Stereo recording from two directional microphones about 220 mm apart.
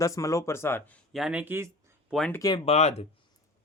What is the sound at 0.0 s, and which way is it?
Speech, 15° left (ahead or behind).